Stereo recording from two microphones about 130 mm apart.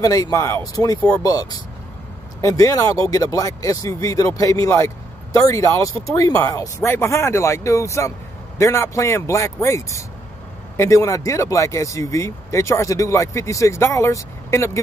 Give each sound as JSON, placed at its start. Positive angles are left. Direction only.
{"t": 0.0, "sound": "speech", "side_deg": 25}